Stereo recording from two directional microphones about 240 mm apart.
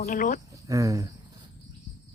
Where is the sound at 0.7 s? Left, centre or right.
Centre.